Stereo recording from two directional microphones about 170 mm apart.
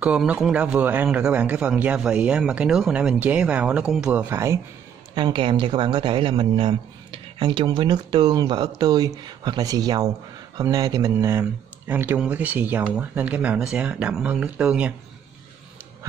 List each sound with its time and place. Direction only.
0.0 s a man's voice: 5° right (ahead or behind)
5.1 s a man's voice: 30° right (ahead or behind); by 15.0 s 10° right (ahead or behind)